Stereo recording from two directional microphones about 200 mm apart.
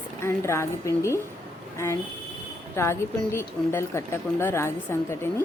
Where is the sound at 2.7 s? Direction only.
15° left (ahead or behind).